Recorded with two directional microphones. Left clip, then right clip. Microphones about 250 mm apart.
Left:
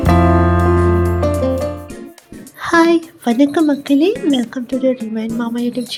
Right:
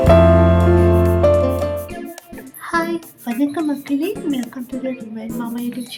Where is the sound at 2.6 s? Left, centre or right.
Left.